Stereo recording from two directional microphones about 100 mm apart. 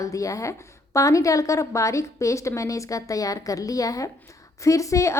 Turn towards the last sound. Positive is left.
turn(degrees=30)  # may be behind; listen again after turning